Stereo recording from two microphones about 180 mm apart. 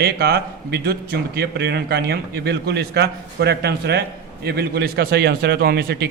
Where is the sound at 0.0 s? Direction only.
60° right (ahead or behind).